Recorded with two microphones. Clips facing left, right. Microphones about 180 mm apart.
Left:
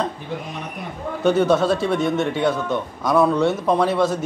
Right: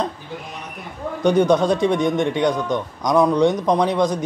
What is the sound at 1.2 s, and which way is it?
A man's voice, 15° right (ahead or behind).